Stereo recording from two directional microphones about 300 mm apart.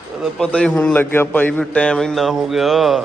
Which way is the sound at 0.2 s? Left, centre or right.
Centre.